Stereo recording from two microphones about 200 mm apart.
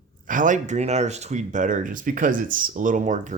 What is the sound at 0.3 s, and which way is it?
Speech, 40° right (ahead or behind).